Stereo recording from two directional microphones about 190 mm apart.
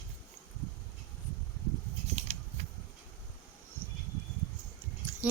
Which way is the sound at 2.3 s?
35° right (ahead or behind).